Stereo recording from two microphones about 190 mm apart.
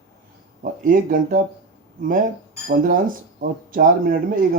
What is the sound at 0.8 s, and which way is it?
Speech, 45° right (ahead or behind).